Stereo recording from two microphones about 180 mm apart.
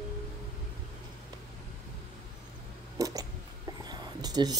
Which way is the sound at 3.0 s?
20° right (ahead or behind).